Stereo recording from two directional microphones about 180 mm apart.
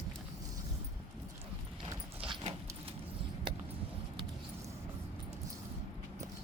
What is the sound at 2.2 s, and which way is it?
Clip-clop, 30° right (ahead or behind).